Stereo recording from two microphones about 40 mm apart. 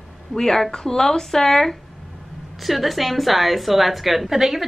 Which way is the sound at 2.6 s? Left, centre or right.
Centre.